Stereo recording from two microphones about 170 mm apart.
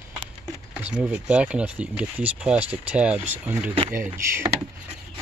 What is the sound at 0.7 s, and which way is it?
Speech, 10° right (ahead or behind).